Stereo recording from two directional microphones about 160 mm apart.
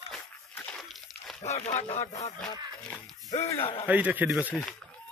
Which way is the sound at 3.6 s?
35° left (ahead or behind).